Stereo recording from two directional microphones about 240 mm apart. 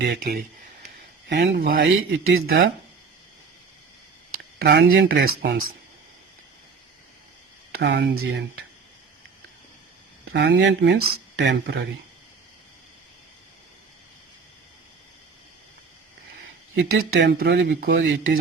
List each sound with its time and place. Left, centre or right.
0.0 s speech: right
2.5 s speech: right
4.6 s speech: right
7.7 s speech: right
10.3 s speech: right
16.7 s speech: right